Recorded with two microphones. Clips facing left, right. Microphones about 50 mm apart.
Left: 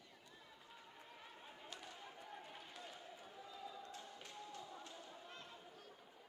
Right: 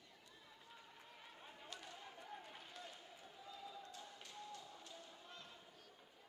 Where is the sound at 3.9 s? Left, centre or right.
Left.